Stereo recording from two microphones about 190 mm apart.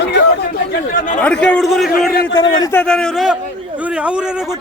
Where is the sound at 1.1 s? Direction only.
5° left (ahead or behind).